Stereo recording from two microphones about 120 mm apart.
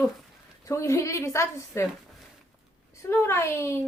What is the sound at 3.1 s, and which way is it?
Speech, 20° left (ahead or behind).